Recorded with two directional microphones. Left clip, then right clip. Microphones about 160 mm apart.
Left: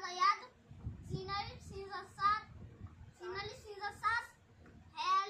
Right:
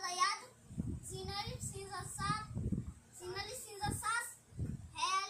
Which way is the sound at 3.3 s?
15° right (ahead or behind).